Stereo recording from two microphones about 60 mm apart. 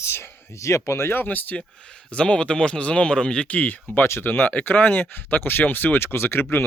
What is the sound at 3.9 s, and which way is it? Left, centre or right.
Speech, left.